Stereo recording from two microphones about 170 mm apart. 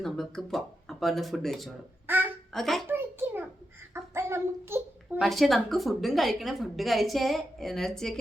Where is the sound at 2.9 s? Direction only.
15° right (ahead or behind).